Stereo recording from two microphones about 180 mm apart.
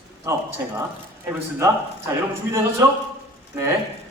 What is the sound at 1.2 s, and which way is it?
A man's voice, 15° right (ahead or behind).